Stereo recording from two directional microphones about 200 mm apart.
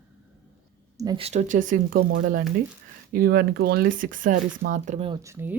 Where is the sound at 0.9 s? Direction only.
20° right (ahead or behind).